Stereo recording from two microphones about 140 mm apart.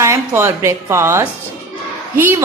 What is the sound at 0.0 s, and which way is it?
A woman's voice, 20° right (ahead or behind).